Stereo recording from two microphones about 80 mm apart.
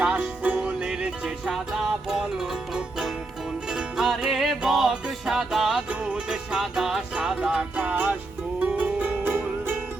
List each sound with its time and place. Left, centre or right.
0.0 s music: centre